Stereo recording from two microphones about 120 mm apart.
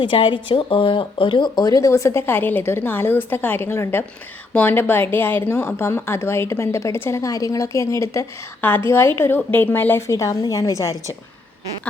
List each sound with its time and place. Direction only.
0.0 s speech: 40° left (ahead or behind); by 10.9 s 25° left (ahead or behind)